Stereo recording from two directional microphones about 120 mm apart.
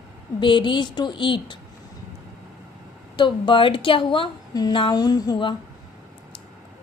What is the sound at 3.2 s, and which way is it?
A woman's voice, 40° left (ahead or behind).